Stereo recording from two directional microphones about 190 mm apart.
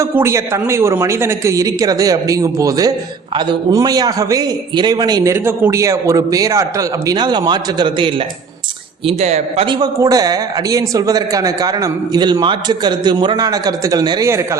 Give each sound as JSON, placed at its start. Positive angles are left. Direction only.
{"t": 0.0, "sound": "speech", "side_deg": -15}